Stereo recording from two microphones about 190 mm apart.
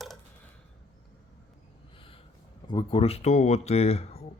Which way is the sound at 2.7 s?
25° left (ahead or behind).